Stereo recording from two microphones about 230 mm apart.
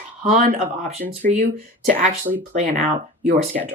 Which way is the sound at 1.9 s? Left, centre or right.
Right.